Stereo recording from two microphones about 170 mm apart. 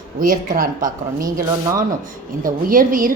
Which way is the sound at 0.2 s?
55° right (ahead or behind).